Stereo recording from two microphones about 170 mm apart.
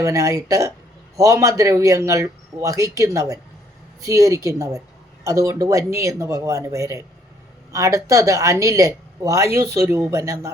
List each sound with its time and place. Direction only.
0.0 s a man's voice: 20° right (ahead or behind)